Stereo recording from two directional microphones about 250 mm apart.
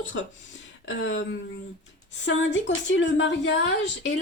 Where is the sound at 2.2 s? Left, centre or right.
Left.